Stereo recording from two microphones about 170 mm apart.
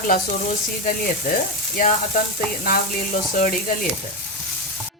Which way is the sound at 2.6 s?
60° left (ahead or behind).